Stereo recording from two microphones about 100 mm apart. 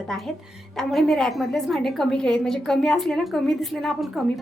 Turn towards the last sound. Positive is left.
turn(degrees=0)  # may be behind; listen again after turning